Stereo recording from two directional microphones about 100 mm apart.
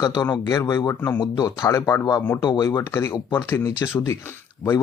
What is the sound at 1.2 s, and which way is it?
Speech, 45° left (ahead or behind).